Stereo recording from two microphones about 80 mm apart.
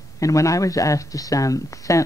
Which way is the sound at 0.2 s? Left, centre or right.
Left.